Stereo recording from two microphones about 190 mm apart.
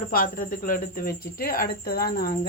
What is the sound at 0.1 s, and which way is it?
Speech, 50° left (ahead or behind).